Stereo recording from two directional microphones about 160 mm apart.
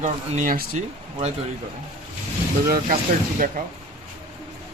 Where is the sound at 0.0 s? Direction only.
55° right (ahead or behind).